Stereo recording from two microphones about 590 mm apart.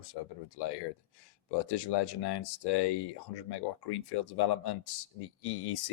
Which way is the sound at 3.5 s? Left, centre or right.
Left.